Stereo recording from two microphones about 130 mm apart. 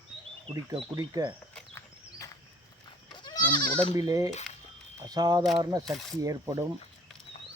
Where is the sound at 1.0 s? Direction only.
30° right (ahead or behind).